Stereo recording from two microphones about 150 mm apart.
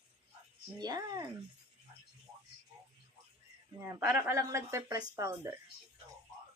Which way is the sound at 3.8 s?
15° right (ahead or behind).